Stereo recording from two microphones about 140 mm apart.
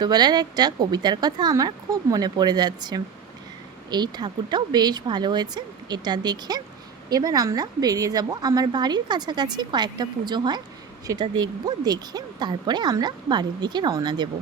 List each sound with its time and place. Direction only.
0.0 s a woman's voice: 30° right (ahead or behind)